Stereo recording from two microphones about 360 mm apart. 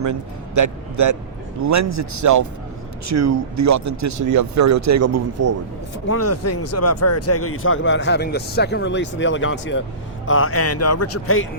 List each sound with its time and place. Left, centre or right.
0.0 s speech: right
6.1 s speech: left